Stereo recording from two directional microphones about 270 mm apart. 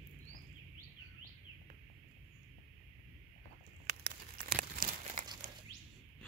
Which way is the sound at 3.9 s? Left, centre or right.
Right.